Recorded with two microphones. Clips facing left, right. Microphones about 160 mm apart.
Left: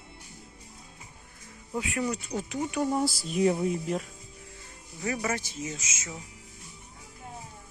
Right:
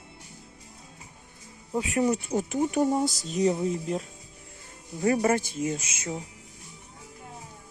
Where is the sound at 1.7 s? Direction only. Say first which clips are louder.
Right 4 dB; 35° right (ahead or behind).